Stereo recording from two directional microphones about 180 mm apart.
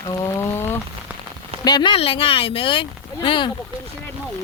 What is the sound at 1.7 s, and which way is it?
Speech, 25° left (ahead or behind).